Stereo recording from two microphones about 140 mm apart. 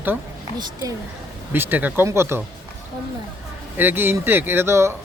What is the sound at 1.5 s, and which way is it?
Speech, 15° right (ahead or behind).